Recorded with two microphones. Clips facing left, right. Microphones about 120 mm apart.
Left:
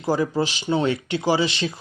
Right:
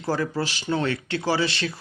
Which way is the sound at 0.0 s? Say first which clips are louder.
Left 4 dB; 15° left (ahead or behind).